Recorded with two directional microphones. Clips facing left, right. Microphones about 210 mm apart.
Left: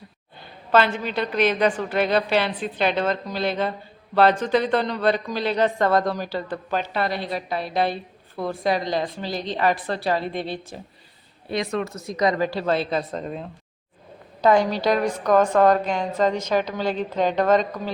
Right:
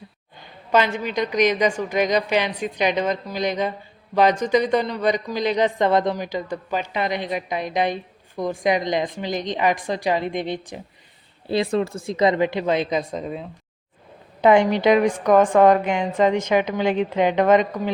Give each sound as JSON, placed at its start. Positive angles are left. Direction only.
{"t": 0.7, "sound": "a woman's voice", "side_deg": -15}
{"t": 11.4, "sound": "a woman's voice", "side_deg": -30}
{"t": 14.4, "sound": "a woman's voice", "side_deg": -20}